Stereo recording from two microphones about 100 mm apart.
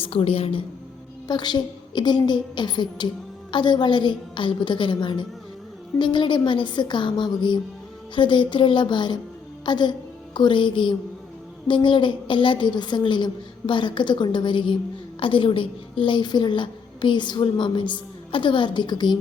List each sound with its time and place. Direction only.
0.0 s a woman's voice: 65° left (ahead or behind)
1.3 s a woman's voice: 50° left (ahead or behind)